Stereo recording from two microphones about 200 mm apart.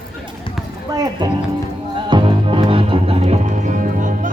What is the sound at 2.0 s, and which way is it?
Music, 25° right (ahead or behind).